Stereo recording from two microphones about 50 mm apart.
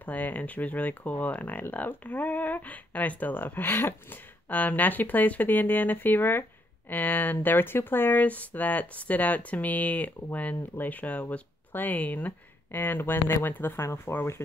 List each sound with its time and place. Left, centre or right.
0.0 s speech: left
13.7 s speech: left